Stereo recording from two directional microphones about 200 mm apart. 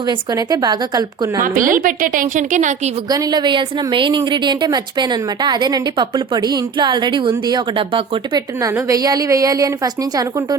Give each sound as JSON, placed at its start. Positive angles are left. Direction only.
{"t": 0.0, "sound": "a woman's voice", "side_deg": -20}
{"t": 1.5, "sound": "a woman's voice", "side_deg": -40}
{"t": 3.1, "sound": "a woman's voice", "side_deg": -20}